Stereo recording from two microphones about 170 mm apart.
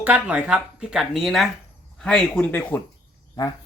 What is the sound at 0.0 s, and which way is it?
Speech, 10° right (ahead or behind).